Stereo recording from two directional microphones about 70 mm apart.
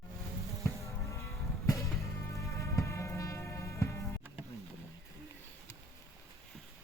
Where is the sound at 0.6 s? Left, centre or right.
Left.